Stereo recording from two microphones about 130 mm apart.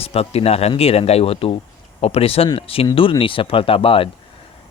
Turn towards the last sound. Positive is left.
turn(degrees=45)  # may be behind; listen again after turning